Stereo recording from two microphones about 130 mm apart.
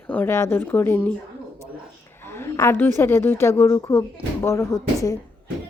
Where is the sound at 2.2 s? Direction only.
20° left (ahead or behind).